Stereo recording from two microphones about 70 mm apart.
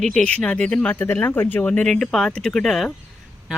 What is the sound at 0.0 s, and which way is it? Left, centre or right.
Speech, centre.